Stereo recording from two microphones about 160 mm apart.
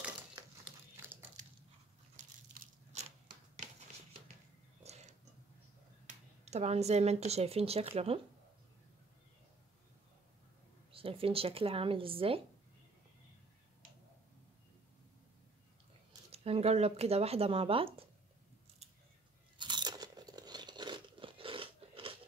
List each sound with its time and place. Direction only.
2.1 s a sound: 45° right (ahead or behind)
4.8 s a sound: 45° right (ahead or behind)
6.0 s speech: 45° right (ahead or behind)
10.9 s speech: 35° right (ahead or behind)
16.3 s speech: 40° right (ahead or behind)
19.6 s crunch: 25° right (ahead or behind)